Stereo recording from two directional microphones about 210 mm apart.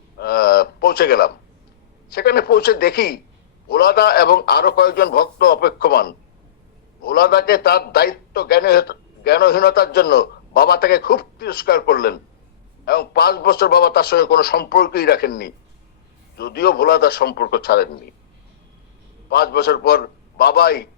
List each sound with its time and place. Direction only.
0.2 s a sound: 45° left (ahead or behind)
2.1 s a man's voice: 50° left (ahead or behind)
19.3 s a man's voice: 50° left (ahead or behind)